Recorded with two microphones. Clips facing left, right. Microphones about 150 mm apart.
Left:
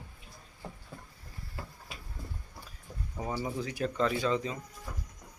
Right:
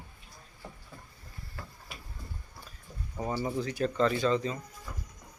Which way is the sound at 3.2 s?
5° left (ahead or behind).